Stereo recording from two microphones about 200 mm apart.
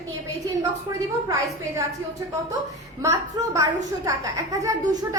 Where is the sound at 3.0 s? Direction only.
15° right (ahead or behind).